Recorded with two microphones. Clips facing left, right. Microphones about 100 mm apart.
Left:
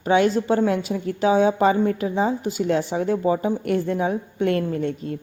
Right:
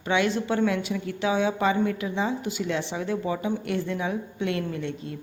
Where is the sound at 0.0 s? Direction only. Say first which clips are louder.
Left 6 dB; 40° left (ahead or behind).